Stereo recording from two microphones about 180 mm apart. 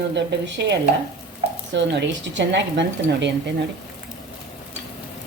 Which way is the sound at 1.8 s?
80° right.